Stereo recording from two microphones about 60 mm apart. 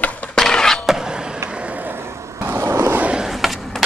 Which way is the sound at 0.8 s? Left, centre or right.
Centre.